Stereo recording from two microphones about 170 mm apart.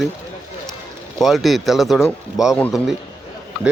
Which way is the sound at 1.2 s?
Centre (ahead or behind).